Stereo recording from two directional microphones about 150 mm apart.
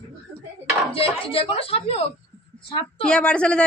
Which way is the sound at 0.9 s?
40° left (ahead or behind).